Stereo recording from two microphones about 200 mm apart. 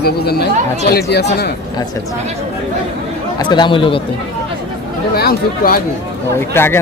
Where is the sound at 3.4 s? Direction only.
25° left (ahead or behind).